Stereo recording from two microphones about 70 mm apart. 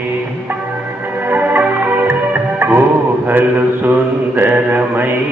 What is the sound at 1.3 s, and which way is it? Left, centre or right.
Mantra, right.